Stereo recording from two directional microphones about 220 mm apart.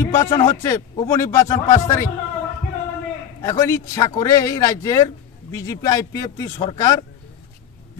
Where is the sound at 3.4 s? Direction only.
15° left (ahead or behind).